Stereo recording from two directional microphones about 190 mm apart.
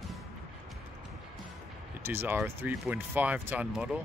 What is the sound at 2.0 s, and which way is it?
Speech, 10° right (ahead or behind).